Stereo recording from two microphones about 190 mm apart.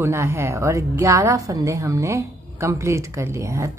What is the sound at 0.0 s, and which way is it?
A woman's voice, 15° right (ahead or behind).